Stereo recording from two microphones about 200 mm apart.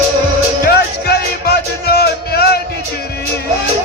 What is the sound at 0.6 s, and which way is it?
Music, 50° left (ahead or behind).